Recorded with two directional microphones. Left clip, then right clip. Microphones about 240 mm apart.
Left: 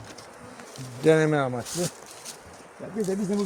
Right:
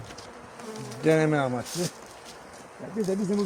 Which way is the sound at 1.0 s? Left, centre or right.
Left.